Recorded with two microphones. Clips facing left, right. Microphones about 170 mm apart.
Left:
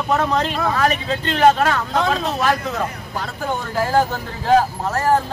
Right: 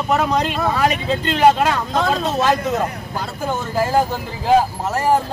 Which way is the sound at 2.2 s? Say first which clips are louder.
Right 2 dB; 20° right (ahead or behind).